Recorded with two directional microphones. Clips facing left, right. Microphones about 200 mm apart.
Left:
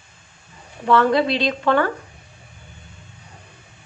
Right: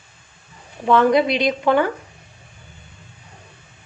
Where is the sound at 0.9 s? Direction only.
15° right (ahead or behind).